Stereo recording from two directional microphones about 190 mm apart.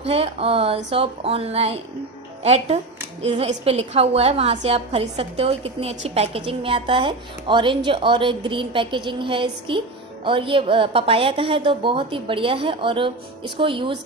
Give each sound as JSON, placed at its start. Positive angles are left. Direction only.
{"t": 0.0, "sound": "a woman's voice", "side_deg": -30}